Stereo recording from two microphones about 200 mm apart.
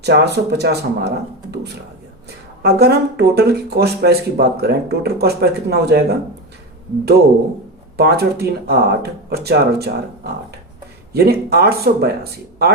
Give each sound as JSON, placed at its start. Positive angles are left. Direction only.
{"t": 0.0, "sound": "speech", "side_deg": -55}
{"t": 7.9, "sound": "speech", "side_deg": -50}